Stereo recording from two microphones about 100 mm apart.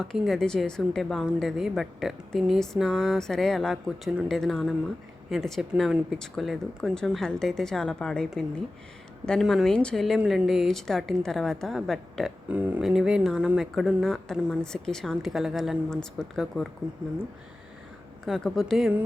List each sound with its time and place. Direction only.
0.0 s a woman's voice: 5° left (ahead or behind)
12.5 s speech: 15° right (ahead or behind)
12.8 s speech: 5° right (ahead or behind)
13.7 s a woman's voice: centre (ahead or behind)
18.3 s a woman's voice: 5° left (ahead or behind)